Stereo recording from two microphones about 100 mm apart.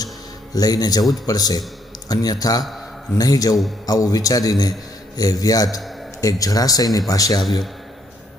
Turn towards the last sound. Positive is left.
turn(degrees=35)  # may be behind; listen again after turning